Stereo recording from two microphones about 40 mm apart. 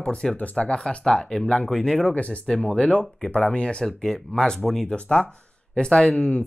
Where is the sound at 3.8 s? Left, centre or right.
Centre; by 6.4 s left.